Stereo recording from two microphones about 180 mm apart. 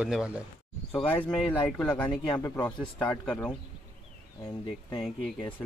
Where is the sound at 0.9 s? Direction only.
10° left (ahead or behind).